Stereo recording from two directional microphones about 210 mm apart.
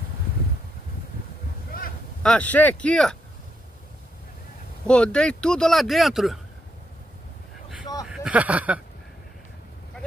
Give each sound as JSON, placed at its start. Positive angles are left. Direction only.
{"t": 2.2, "sound": "speech", "side_deg": 5}
{"t": 4.8, "sound": "speech", "side_deg": 5}
{"t": 8.0, "sound": "a sound", "side_deg": -5}